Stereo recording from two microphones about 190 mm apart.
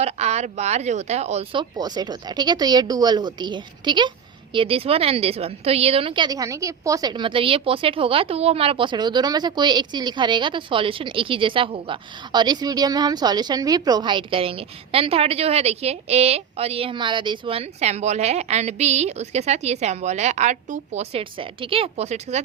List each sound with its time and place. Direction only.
0.0 s a woman's voice: 35° right (ahead or behind)